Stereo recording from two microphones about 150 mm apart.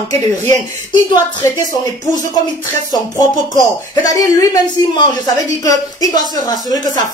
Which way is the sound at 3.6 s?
25° left (ahead or behind).